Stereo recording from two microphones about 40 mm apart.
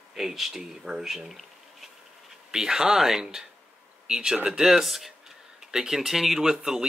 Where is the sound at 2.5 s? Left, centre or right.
Centre.